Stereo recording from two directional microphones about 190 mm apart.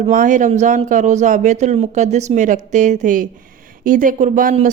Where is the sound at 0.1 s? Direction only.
40° right (ahead or behind).